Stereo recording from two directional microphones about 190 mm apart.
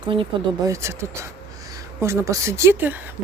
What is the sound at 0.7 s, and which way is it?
Speech, 15° right (ahead or behind).